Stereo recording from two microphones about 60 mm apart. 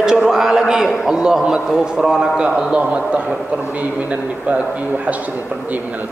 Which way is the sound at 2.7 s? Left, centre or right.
Right.